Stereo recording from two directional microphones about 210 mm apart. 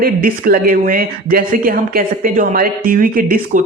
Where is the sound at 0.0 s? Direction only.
45° right (ahead or behind).